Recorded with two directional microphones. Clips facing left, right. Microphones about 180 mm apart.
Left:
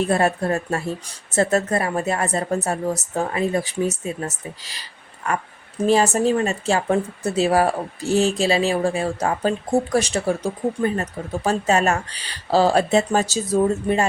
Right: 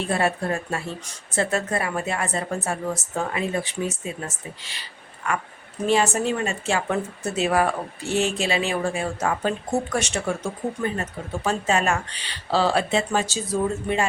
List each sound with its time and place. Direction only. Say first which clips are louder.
0.0 s speech: left 4 dB; 40° left (ahead or behind)